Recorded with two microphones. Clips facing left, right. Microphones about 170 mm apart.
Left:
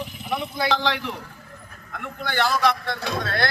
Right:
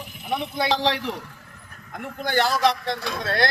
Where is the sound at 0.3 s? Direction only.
25° right (ahead or behind).